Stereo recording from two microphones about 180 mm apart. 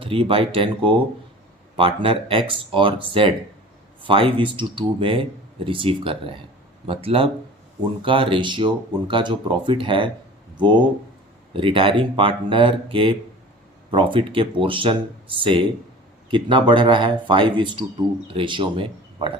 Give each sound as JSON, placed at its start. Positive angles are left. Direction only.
{"t": 0.0, "sound": "speech", "side_deg": -30}